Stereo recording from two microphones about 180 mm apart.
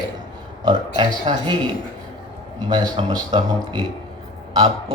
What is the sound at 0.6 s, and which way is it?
Speech, 25° right (ahead or behind).